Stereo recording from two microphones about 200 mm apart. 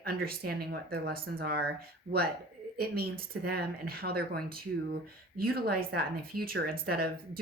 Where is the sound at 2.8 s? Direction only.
50° right (ahead or behind).